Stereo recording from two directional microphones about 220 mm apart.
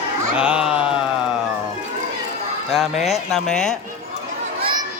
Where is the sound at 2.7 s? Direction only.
Centre (ahead or behind).